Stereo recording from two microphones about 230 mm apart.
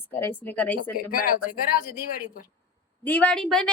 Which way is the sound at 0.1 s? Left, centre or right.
Centre.